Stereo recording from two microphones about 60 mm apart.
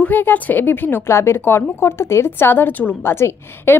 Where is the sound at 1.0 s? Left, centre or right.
Left.